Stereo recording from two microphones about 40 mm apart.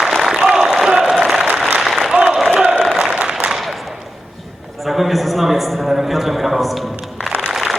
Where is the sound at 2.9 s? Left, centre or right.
Centre.